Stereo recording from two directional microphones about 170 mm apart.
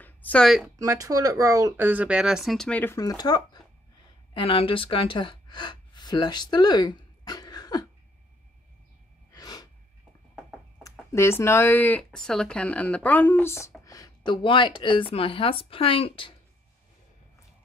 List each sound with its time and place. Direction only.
0.0 s a sound: 10° left (ahead or behind)
0.7 s speech: 20° right (ahead or behind); by 7.8 s 25° left (ahead or behind)
9.3 s sneeze: 20° left (ahead or behind)
11.1 s speech: 15° left (ahead or behind); by 16.3 s 30° left (ahead or behind)